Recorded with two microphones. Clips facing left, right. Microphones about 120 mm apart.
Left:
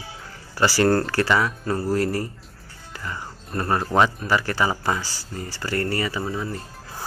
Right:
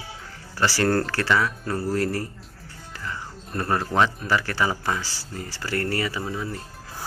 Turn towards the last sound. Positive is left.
turn(degrees=5)  # may be behind; listen again after turning